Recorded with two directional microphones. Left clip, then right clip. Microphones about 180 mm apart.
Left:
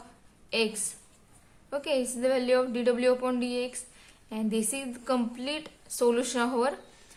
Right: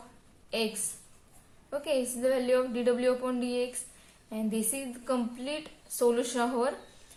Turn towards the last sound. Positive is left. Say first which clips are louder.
# left 2 dB
turn(degrees=30)  # may be behind; listen again after turning